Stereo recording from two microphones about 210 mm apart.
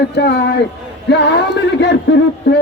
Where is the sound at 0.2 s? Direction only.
55° left (ahead or behind).